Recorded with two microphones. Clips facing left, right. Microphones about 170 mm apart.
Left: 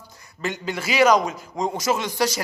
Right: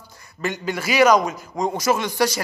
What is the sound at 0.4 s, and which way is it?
A man's voice, 25° left (ahead or behind).